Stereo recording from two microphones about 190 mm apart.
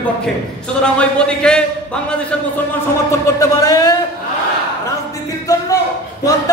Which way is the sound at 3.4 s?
15° left (ahead or behind).